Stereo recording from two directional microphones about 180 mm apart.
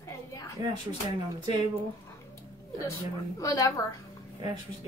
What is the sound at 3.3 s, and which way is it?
Speech, 20° left (ahead or behind).